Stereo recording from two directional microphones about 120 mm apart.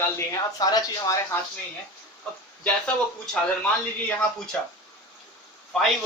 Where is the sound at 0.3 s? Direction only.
30° left (ahead or behind).